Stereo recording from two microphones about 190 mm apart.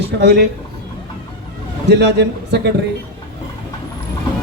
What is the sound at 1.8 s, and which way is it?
Speech, 65° right (ahead or behind).